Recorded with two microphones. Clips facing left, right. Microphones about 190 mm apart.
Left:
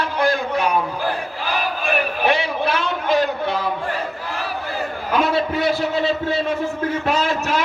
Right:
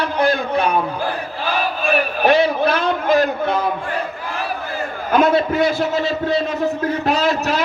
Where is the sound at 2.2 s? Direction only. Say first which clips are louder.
Right 7 dB; 40° right (ahead or behind).